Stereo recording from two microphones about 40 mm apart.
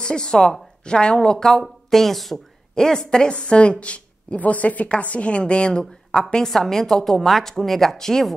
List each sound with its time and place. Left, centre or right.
0.0 s a woman's voice: centre
1.9 s a woman's voice: centre; by 6.2 s left
6.4 s speech: centre